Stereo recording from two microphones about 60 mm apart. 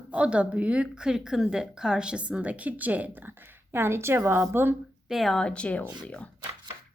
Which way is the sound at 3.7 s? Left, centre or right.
Right.